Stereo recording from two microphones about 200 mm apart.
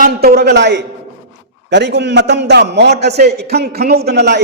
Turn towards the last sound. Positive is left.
turn(degrees=-55)  # may be behind; listen again after turning